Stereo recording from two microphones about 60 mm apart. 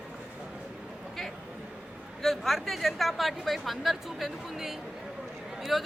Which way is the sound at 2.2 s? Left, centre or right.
Centre.